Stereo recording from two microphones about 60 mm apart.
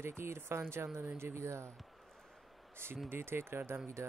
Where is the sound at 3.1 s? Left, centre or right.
Right.